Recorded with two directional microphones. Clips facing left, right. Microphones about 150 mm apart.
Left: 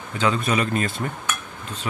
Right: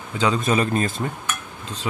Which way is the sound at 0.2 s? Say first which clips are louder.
Right 2 dB; 30° right (ahead or behind).